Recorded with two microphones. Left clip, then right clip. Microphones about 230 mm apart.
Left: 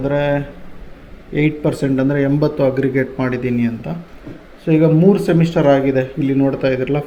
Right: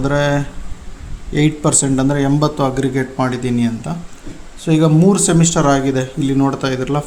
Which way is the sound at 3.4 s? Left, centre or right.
Right.